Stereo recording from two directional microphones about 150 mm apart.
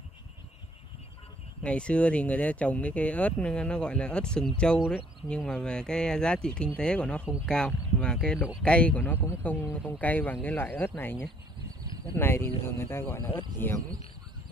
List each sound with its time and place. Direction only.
1.6 s speech: 5° left (ahead or behind)